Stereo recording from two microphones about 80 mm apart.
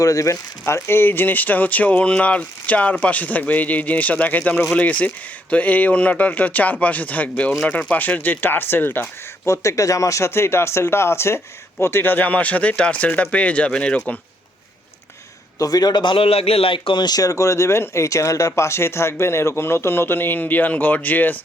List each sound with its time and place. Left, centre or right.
0.0 s speech: left
0.6 s speech: left
9.5 s speech: left; by 14.0 s centre
15.5 s a man's voice: left
16.6 s speech: left